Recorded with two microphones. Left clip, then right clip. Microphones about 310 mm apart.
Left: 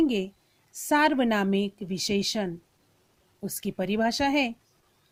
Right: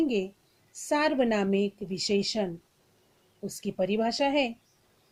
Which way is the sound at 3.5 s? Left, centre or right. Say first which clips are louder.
Right 1 dB; left.